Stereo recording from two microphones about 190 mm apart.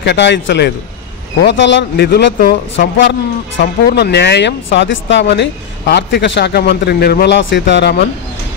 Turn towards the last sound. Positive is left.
turn(degrees=65)  # may be behind; listen again after turning